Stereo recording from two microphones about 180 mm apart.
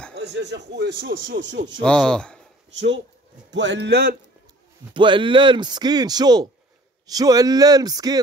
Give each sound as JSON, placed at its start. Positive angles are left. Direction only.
{"t": 0.1, "sound": "speech", "side_deg": -70}
{"t": 1.8, "sound": "speech", "side_deg": 5}
{"t": 3.5, "sound": "speech", "side_deg": -80}
{"t": 4.9, "sound": "speech", "side_deg": -25}